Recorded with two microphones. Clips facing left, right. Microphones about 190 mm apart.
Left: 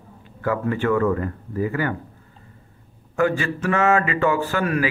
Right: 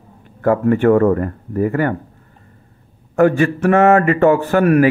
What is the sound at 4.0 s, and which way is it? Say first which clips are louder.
Speech: right 8 dB; 55° right (ahead or behind).